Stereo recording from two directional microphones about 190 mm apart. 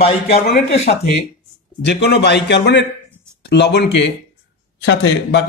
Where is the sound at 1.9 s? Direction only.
65° left (ahead or behind).